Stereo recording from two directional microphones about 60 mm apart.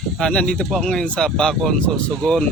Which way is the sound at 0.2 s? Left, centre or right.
Centre.